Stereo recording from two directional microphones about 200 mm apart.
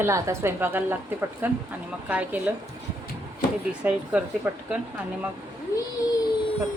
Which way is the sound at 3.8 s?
5° right (ahead or behind).